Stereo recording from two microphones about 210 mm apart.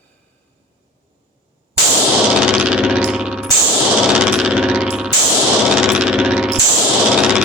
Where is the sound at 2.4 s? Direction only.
5° right (ahead or behind).